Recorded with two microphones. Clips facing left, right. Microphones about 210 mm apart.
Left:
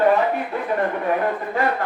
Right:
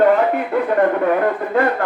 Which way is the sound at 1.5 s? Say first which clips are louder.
Right 5 dB; 55° right (ahead or behind).